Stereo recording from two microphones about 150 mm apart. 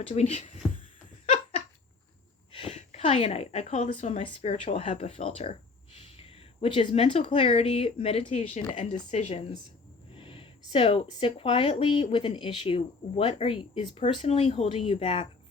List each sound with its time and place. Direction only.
0.0 s speech: 40° left (ahead or behind)
2.5 s speech: 40° left (ahead or behind)
10.2 s speech: 35° left (ahead or behind)